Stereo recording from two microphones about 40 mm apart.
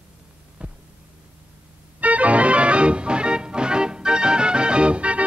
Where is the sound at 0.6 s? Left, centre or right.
Right.